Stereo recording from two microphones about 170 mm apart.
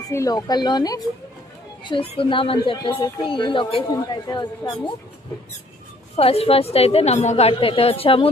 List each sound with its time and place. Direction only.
0.1 s a woman's voice: 20° left (ahead or behind)
6.1 s a woman's voice: 35° left (ahead or behind)